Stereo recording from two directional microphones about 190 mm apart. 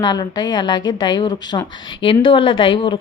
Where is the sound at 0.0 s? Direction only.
20° left (ahead or behind).